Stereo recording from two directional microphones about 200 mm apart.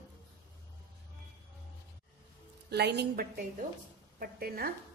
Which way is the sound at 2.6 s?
55° right (ahead or behind).